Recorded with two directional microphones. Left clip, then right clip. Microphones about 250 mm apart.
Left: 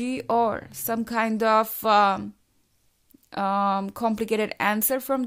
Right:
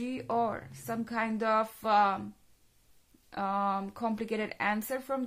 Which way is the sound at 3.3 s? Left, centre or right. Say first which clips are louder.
Left 7 dB; left.